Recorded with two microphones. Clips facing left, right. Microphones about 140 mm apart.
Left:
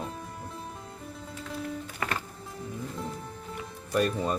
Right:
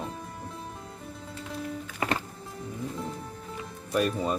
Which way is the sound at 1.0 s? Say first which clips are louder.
Even; centre (ahead or behind).